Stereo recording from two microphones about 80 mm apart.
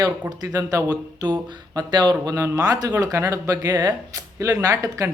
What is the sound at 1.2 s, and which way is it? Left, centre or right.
Speech, right.